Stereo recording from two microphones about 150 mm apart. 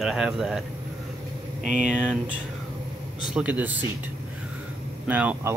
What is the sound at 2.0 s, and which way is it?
Speech, 5° right (ahead or behind).